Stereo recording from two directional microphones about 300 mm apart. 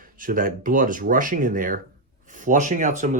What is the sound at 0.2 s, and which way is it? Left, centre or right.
Speech, right.